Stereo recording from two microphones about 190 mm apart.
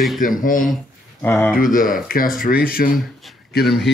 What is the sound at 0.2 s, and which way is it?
Speech, 45° left (ahead or behind).